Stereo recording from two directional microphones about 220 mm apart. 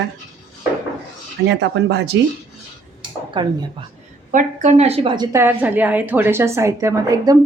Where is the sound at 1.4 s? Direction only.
50° right (ahead or behind).